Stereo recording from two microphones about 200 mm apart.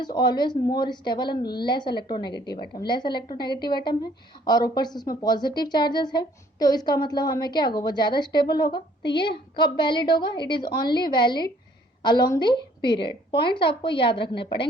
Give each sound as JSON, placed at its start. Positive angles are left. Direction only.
{"t": 0.0, "sound": "speech", "side_deg": 20}